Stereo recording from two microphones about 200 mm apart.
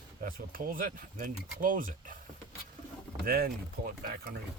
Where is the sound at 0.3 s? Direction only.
45° right (ahead or behind).